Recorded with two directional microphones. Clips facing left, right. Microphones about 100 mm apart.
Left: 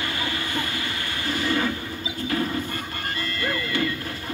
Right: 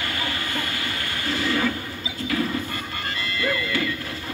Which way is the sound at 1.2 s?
30° left (ahead or behind).